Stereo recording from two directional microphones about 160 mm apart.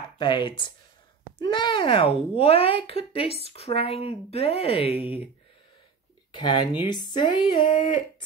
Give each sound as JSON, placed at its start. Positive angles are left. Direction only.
{"t": 0.2, "sound": "speech", "side_deg": 30}
{"t": 6.3, "sound": "speech", "side_deg": 30}